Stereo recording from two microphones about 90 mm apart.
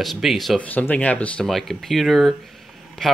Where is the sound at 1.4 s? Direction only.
Centre (ahead or behind).